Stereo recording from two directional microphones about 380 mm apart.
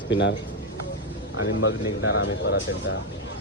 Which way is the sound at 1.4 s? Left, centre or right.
Left.